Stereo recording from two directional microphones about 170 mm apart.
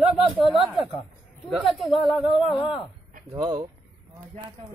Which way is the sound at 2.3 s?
30° left (ahead or behind).